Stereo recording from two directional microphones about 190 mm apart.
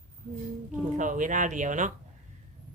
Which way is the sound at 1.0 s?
45° right (ahead or behind).